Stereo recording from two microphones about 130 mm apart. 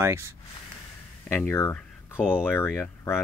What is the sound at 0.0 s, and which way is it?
Speech, 20° right (ahead or behind).